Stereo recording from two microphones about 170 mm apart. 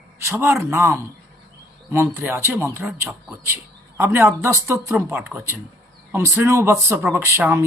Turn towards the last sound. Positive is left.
turn(degrees=-15)  # may be behind; listen again after turning